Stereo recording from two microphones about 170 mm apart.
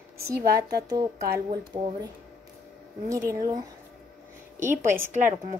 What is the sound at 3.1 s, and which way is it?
Speech, 15° right (ahead or behind).